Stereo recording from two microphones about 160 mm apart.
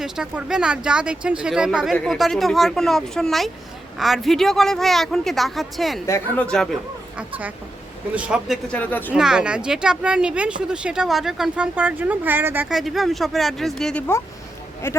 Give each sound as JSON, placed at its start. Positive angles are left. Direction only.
{"t": 0.0, "sound": "speech", "side_deg": -5}
{"t": 6.1, "sound": "speech", "side_deg": 10}
{"t": 7.2, "sound": "speech", "side_deg": -10}
{"t": 8.7, "sound": "speech", "side_deg": 10}
{"t": 9.1, "sound": "speech", "side_deg": -5}
{"t": 14.8, "sound": "speech", "side_deg": 15}